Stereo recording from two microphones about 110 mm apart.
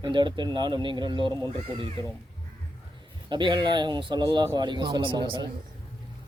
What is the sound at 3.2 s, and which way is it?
Speech, 45° right (ahead or behind).